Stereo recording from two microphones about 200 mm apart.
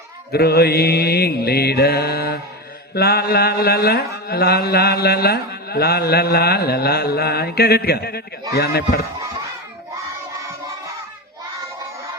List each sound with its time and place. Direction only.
0.3 s mantra: 50° left (ahead or behind)